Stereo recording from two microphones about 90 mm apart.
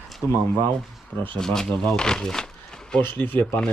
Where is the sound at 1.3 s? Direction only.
5° left (ahead or behind).